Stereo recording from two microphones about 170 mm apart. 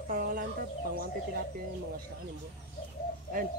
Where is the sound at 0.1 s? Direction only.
60° right (ahead or behind).